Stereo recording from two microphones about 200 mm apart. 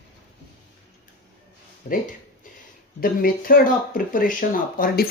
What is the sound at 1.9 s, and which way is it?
Speech, 35° left (ahead or behind).